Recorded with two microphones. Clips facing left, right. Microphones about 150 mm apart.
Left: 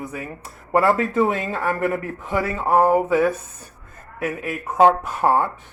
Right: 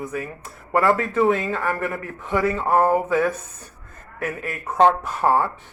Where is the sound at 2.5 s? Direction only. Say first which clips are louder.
Left 4 dB; 5° left (ahead or behind).